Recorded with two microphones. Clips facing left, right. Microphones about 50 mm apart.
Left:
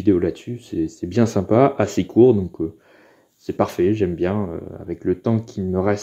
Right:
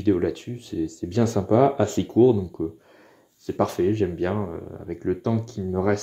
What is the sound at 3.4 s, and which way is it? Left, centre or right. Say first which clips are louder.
Speech: left 4 dB; left.